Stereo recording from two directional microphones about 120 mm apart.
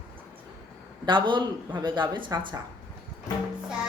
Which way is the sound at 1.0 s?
40° right (ahead or behind).